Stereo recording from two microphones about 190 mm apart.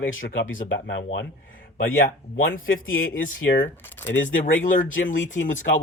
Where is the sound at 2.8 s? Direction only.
90° left.